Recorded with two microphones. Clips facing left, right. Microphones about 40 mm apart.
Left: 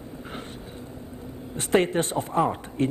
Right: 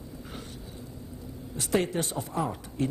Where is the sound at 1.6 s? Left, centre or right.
Left.